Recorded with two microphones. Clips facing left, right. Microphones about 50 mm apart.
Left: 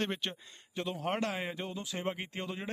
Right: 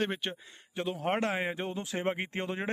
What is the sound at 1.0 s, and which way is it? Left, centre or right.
Speech, right.